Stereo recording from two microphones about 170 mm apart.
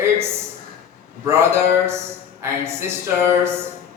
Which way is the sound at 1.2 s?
15° right (ahead or behind).